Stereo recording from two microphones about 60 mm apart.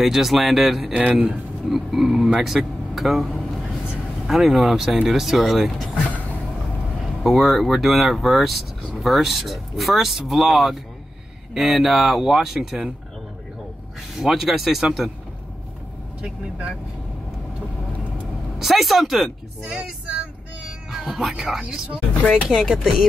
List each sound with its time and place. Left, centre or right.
0.0 s speech: centre
7.2 s speech: centre
14.1 s speech: centre
16.2 s speech: centre
18.6 s speech: centre
19.7 s speech: centre
20.6 s cat: centre
22.5 s speech: centre